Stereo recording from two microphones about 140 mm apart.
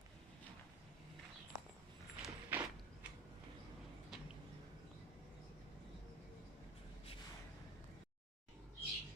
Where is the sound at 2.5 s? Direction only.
15° right (ahead or behind).